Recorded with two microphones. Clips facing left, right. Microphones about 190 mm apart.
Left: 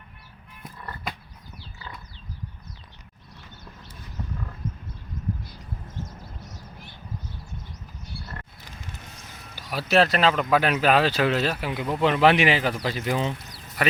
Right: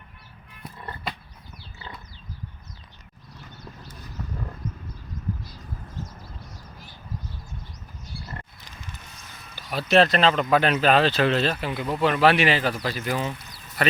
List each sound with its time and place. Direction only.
9.6 s speech: 10° left (ahead or behind)
13.8 s speech: 10° left (ahead or behind)